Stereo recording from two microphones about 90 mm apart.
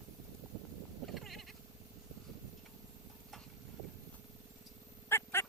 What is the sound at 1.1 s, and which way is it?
Cat, centre (ahead or behind).